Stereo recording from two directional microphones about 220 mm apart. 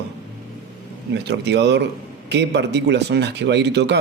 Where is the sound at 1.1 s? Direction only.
50° right (ahead or behind).